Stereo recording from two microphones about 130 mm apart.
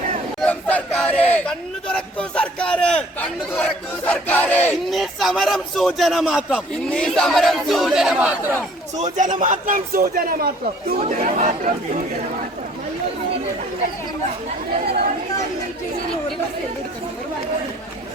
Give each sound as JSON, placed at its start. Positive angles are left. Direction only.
{"t": 0.3, "sound": "a sound", "side_deg": 5}
{"t": 4.0, "sound": "battle cry", "side_deg": 10}
{"t": 4.9, "sound": "speech", "side_deg": 0}
{"t": 9.1, "sound": "speech", "side_deg": -75}
{"t": 11.0, "sound": "speech", "side_deg": -75}